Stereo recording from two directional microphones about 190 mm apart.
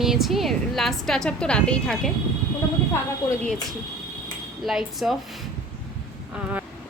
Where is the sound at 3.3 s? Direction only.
5° left (ahead or behind).